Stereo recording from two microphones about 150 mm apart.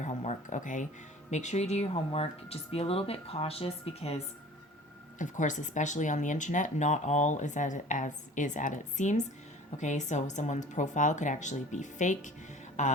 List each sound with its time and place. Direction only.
0.0 s a sound: 50° left (ahead or behind)
1.3 s speech: 50° left (ahead or behind)
5.2 s speech: 55° left (ahead or behind)